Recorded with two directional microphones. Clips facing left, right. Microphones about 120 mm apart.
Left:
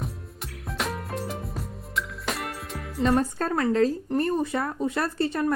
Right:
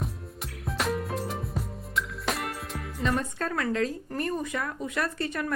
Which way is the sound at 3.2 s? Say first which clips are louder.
Left 5 dB; 35° left (ahead or behind).